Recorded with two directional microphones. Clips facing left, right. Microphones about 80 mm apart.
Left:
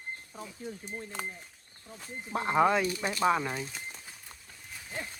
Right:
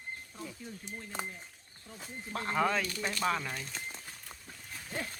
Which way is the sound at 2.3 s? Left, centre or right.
Centre.